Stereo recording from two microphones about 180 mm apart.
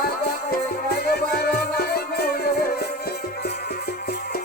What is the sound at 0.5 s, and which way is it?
Music, 60° left (ahead or behind).